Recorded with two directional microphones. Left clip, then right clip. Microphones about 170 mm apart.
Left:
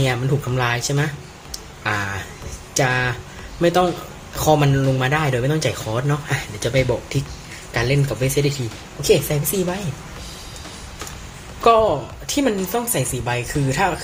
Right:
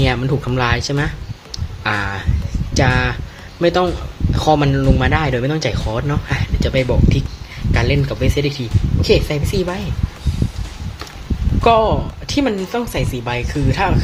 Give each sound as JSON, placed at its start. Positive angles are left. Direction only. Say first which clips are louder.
{"t": 0.0, "sound": "speech", "louder": "right 3 dB", "side_deg": -25}
{"t": 9.0, "sound": "speech", "louder": "right 1 dB", "side_deg": -25}
{"t": 11.6, "sound": "speech", "louder": "right 1 dB", "side_deg": -20}